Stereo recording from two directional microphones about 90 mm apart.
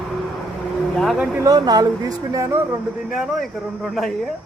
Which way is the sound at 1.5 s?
45° right (ahead or behind).